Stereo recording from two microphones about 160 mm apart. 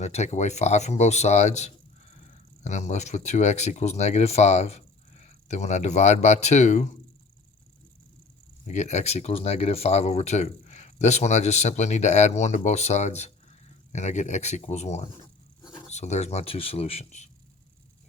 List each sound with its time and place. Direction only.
0.0 s speech: 45° left (ahead or behind)
8.6 s speech: 45° left (ahead or behind)
15.6 s zipper: 25° left (ahead or behind)
15.9 s speech: 45° left (ahead or behind)